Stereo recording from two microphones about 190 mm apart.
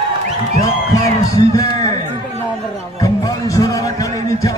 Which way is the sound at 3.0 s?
20° left (ahead or behind).